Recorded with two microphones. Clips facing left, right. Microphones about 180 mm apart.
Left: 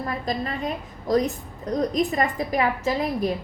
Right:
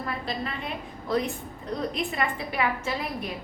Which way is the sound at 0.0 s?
40° left (ahead or behind).